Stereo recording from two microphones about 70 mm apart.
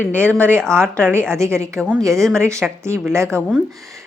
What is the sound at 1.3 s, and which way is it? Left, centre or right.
A woman's voice, right.